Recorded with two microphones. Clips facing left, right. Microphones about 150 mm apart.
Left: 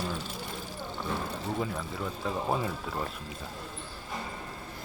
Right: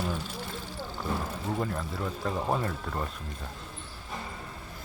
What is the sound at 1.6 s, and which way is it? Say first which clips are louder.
Speech: right 1 dB; centre (ahead or behind).